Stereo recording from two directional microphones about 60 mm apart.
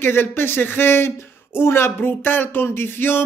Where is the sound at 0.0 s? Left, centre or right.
Left.